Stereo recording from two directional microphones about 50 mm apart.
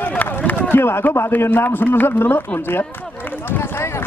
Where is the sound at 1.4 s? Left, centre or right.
Left.